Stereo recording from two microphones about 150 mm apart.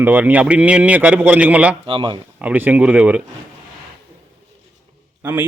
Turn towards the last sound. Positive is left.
turn(degrees=-10)  # may be behind; listen again after turning